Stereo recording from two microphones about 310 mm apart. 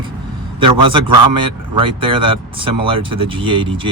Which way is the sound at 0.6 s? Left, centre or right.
Centre.